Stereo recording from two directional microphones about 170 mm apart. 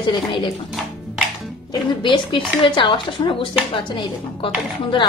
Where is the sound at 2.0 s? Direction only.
30° left (ahead or behind).